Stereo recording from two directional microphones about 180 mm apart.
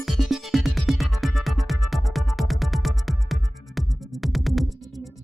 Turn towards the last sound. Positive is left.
turn(degrees=0)  # may be behind; listen again after turning